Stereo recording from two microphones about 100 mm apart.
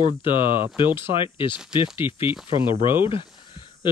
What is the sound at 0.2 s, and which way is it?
Speech, 55° left (ahead or behind).